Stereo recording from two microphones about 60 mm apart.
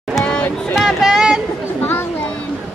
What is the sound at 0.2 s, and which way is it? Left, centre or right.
Music, left.